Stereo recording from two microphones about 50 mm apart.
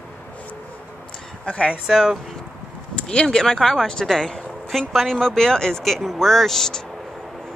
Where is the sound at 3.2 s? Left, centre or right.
Centre.